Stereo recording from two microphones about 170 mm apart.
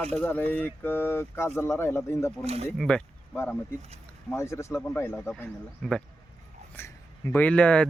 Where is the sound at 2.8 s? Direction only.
5° left (ahead or behind).